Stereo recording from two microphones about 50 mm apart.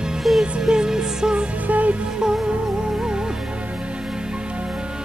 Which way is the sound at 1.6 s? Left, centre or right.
Right.